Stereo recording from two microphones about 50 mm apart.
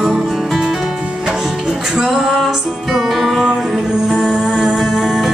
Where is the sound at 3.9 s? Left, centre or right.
Centre.